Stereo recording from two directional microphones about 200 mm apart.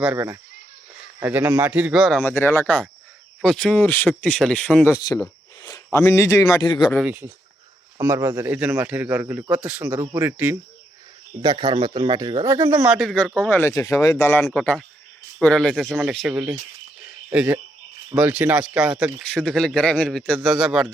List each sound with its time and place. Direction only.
0.0 s speech: 10° right (ahead or behind)
2.2 s speech: 10° left (ahead or behind)
7.0 s speech: 10° right (ahead or behind)
9.8 s speech: 15° right (ahead or behind)
11.4 s speech: 20° right (ahead or behind); by 15.8 s 5° left (ahead or behind)
15.8 s speech: 5° right (ahead or behind)